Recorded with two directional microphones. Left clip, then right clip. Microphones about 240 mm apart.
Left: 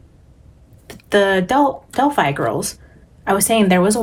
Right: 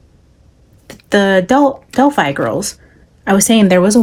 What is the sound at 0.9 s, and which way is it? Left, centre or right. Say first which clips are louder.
Speech: right 3 dB; right.